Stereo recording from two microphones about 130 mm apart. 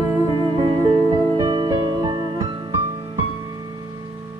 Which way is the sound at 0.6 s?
35° right (ahead or behind).